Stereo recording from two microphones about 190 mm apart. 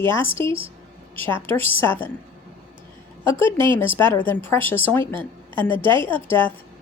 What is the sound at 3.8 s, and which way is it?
A woman's voice, 10° left (ahead or behind).